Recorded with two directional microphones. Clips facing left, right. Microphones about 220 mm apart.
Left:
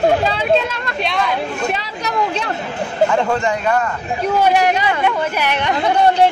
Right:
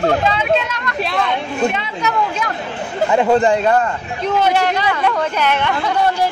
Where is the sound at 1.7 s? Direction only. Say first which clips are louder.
Right 1 dB; 35° left (ahead or behind).